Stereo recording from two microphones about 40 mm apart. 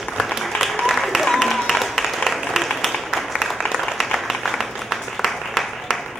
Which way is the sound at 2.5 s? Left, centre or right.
Centre.